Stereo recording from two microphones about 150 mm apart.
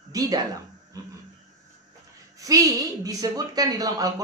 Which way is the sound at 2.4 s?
25° right (ahead or behind).